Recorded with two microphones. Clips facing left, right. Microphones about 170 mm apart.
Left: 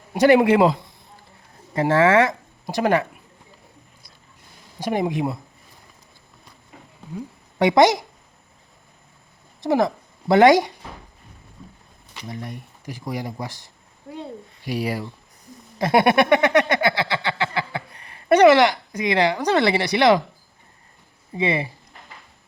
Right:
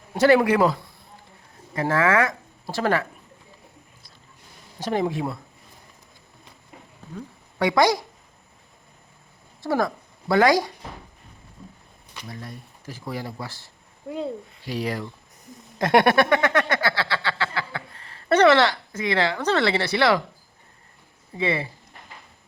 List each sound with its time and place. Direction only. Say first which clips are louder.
0.1 s speech: left 3 dB; 20° left (ahead or behind)
4.8 s speech: left 2 dB; 15° left (ahead or behind)
7.6 s speech: left 4 dB; 20° left (ahead or behind)
9.6 s speech: left 4 dB; 20° left (ahead or behind)
12.3 s speech: left 5 dB; 20° left (ahead or behind)
16.1 s a sound: left 3 dB; 20° left (ahead or behind)
21.3 s speech: left 2 dB; 15° left (ahead or behind)